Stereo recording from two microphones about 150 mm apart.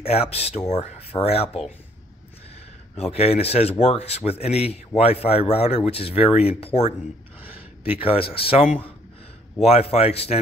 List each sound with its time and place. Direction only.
0.0 s a man's voice: 40° left (ahead or behind)
3.0 s a man's voice: 40° left (ahead or behind)
8.0 s a man's voice: 40° left (ahead or behind)